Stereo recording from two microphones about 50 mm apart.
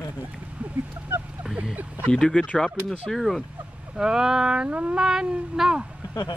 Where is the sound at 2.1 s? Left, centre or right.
Centre.